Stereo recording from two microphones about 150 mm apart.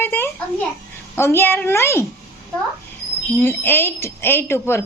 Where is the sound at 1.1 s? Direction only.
15° left (ahead or behind).